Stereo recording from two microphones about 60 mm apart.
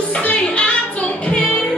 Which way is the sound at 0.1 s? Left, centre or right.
Left.